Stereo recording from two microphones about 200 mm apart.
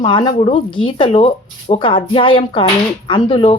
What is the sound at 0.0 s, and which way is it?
A woman's voice, 25° left (ahead or behind).